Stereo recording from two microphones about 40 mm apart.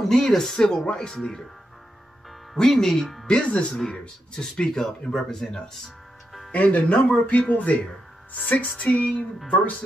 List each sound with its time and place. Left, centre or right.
0.1 s speech: centre
0.8 s speech: left
1.1 s speech: centre
2.5 s speech: centre
3.3 s speech: left; by 5.6 s centre
6.5 s speech: left